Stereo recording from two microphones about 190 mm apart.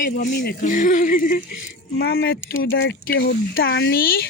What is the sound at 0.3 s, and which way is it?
Speech, 50° left (ahead or behind).